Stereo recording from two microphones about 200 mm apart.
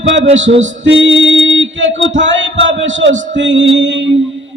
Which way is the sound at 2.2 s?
65° right (ahead or behind).